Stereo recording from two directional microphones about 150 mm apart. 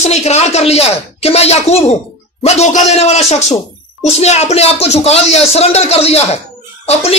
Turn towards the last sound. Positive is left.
turn(degrees=45)  # may be behind; listen again after turning